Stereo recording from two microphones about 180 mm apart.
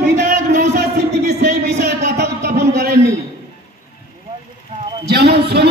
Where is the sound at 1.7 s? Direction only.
65° right (ahead or behind).